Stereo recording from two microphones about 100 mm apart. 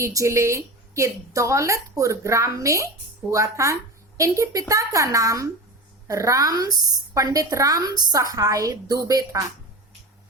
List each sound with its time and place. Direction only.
0.0 s a woman's voice: 30° right (ahead or behind)